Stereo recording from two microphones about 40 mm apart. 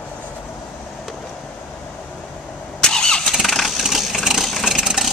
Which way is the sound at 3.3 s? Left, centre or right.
Centre.